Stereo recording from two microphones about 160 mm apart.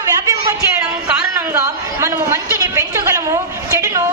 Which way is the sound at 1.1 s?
15° right (ahead or behind).